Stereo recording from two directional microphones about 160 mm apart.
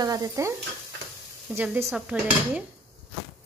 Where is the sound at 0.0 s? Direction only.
20° right (ahead or behind).